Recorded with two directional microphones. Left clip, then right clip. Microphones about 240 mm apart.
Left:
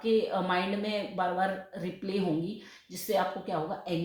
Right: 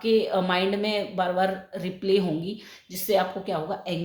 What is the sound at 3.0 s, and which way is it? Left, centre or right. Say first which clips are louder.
Speech: right 5 dB; right.